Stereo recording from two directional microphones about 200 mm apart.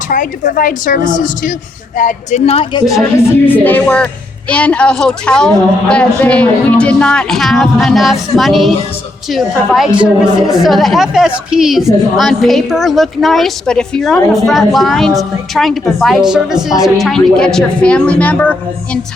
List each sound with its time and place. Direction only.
0.1 s a woman's voice: 40° left (ahead or behind)
2.9 s speech: 10° left (ahead or behind)